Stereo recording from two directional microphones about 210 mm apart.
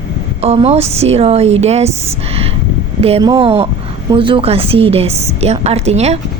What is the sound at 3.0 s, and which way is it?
A woman's voice, 30° right (ahead or behind).